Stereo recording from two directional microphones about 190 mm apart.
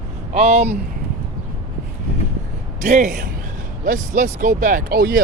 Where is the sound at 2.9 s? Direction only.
40° right (ahead or behind).